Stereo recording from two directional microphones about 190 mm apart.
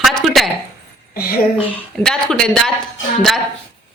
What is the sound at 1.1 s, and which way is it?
Speech, 50° left (ahead or behind).